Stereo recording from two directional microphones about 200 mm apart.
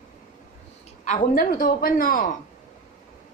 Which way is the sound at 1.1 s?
40° left (ahead or behind).